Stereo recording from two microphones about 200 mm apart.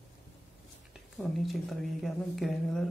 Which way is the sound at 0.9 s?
Centre (ahead or behind).